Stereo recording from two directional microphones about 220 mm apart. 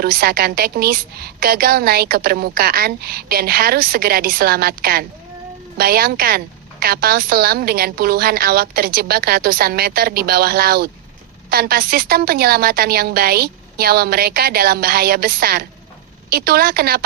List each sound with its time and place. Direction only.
0.0 s a woman's voice: 40° right (ahead or behind)